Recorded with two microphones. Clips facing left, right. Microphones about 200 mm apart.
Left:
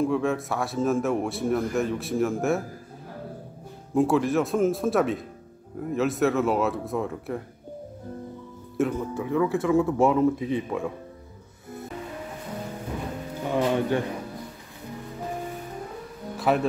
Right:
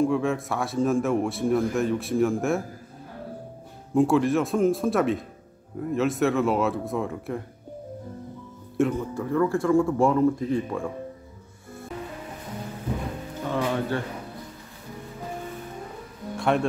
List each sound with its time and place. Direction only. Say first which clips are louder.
0.0 s a man's voice: right 1 dB; centre (ahead or behind)
3.9 s a man's voice: right 1 dB; centre (ahead or behind)
8.7 s a man's voice: right 1 dB; centre (ahead or behind)
13.5 s music: left 3 dB; 15° left (ahead or behind)
16.3 s music: even; 5° left (ahead or behind)